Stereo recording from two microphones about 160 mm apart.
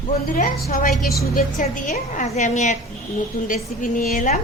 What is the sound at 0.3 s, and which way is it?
Speech, 60° left (ahead or behind).